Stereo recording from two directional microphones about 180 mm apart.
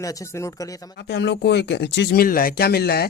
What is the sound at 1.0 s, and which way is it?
Speech, 70° left (ahead or behind).